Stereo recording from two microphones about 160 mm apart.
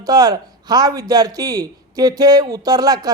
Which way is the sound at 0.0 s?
25° right (ahead or behind).